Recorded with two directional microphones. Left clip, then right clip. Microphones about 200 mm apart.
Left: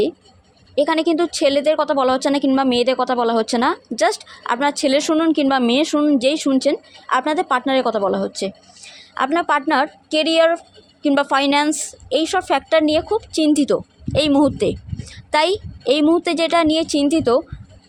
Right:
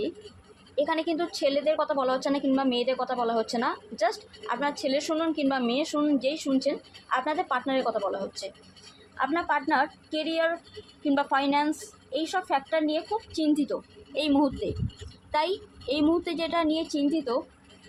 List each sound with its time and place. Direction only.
0.8 s speech: 45° left (ahead or behind)